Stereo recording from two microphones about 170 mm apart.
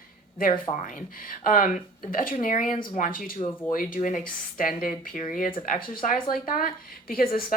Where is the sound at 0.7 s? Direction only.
50° left (ahead or behind).